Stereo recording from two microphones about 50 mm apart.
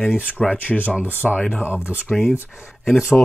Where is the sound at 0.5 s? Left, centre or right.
Left.